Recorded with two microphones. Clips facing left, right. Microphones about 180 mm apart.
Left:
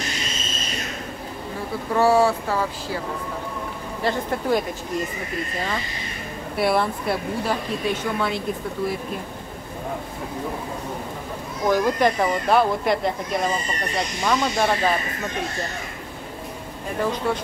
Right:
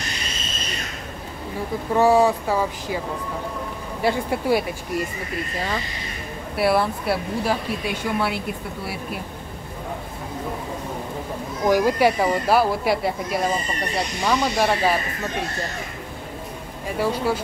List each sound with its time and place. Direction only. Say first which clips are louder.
2.0 s speech: right 1 dB; 15° right (ahead or behind)
4.0 s speech: right 2 dB; 10° right (ahead or behind)
6.5 s speech: right 1 dB; 5° right (ahead or behind)
11.6 s speech: right 2 dB; 10° right (ahead or behind)
17.0 s speech: right 1 dB; 10° right (ahead or behind)